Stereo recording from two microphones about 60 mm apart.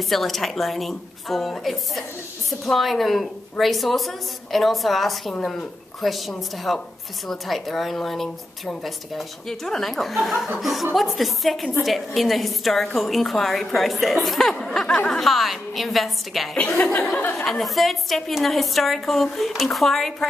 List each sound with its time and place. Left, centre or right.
0.1 s speech: centre
16.5 s speech: left
17.5 s speech: centre